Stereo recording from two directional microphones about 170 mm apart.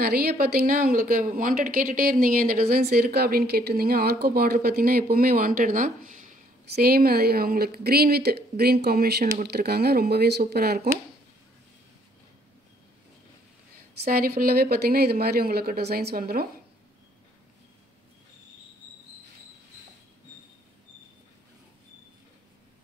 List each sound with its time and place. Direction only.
0.0 s a woman's voice: 65° right (ahead or behind); by 6.3 s 50° right (ahead or behind)
6.7 s a woman's voice: 65° right (ahead or behind)
14.0 s a woman's voice: 60° right (ahead or behind)